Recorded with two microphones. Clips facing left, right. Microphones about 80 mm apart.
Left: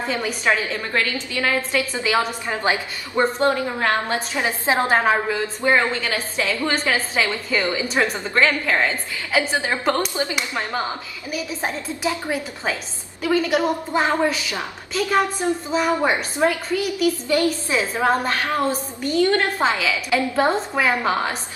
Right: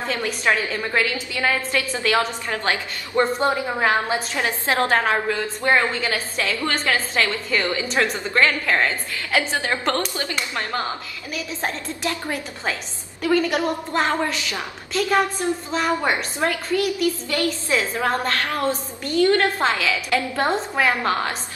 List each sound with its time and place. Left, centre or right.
0.1 s a woman's voice: centre
0.7 s a woman's voice: centre
2.0 s a woman's voice: centre
3.4 s a woman's voice: centre
4.3 s a woman's voice: centre
5.9 s a woman's voice: centre
13.2 s a woman's voice: centre
13.6 s a woman's voice: centre
18.7 s a woman's voice: centre